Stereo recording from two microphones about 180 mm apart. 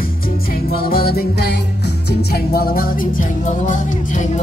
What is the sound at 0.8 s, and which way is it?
Music, 55° left (ahead or behind).